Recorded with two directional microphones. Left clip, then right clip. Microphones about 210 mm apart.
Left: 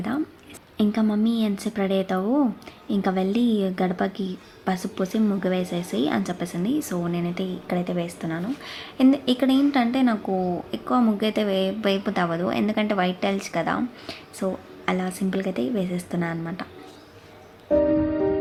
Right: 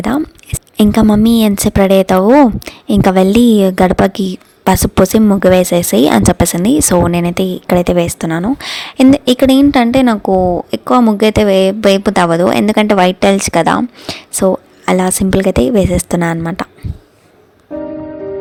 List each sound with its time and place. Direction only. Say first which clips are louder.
0.0 s a woman's voice: right 12 dB; 55° right (ahead or behind)